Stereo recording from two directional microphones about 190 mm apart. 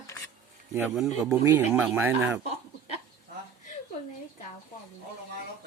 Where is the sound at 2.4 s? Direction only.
35° left (ahead or behind).